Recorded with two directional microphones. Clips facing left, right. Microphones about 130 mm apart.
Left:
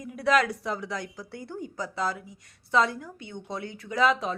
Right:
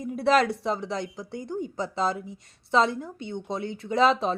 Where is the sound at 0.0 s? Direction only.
30° right (ahead or behind).